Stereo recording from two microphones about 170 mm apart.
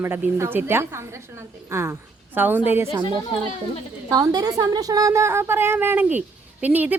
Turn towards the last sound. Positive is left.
turn(degrees=-10)  # may be behind; listen again after turning